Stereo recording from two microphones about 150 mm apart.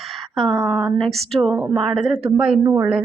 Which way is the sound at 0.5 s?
25° right (ahead or behind).